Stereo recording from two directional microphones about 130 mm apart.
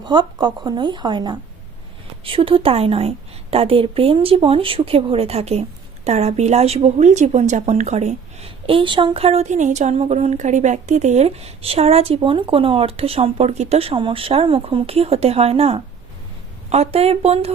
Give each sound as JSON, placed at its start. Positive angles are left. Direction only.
{"t": 0.0, "sound": "speech", "side_deg": -35}
{"t": 2.2, "sound": "a woman's voice", "side_deg": -45}